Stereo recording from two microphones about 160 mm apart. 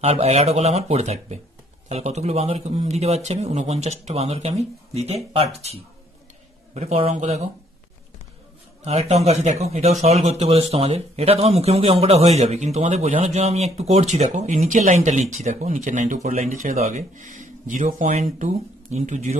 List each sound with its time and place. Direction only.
0.0 s speech: 40° right (ahead or behind)
8.8 s speech: 40° right (ahead or behind)